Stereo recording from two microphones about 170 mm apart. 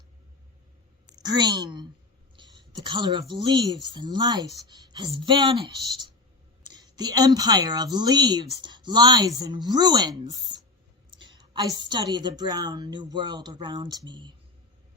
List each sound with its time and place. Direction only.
1.1 s a woman's voice: 25° right (ahead or behind)